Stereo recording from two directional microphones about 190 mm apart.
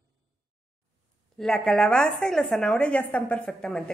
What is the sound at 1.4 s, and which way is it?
A woman's voice, 5° left (ahead or behind).